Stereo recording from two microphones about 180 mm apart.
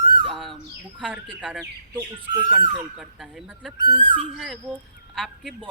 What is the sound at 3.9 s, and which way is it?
Speech, 30° right (ahead or behind).